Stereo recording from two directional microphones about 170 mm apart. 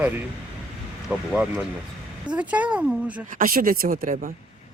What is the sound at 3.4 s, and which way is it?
Speech, 55° right (ahead or behind).